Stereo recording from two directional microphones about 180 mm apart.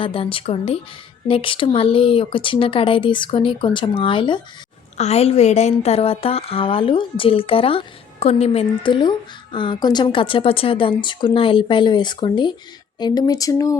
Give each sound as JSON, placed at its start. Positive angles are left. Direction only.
{"t": 0.0, "sound": "a woman's voice", "side_deg": 30}